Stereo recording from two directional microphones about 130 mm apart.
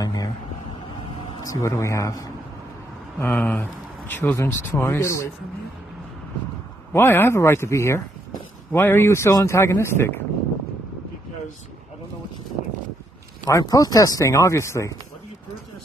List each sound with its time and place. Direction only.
0.0 s a sound: 30° left (ahead or behind)
1.4 s speech: 25° left (ahead or behind)
6.9 s speech: 15° left (ahead or behind)
13.5 s speech: 25° left (ahead or behind)